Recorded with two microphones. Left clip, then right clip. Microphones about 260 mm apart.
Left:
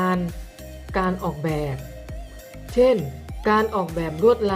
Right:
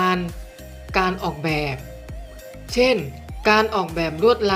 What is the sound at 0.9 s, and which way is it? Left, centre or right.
Speech, centre.